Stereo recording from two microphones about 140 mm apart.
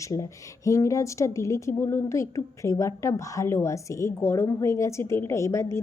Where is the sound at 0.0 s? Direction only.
25° left (ahead or behind).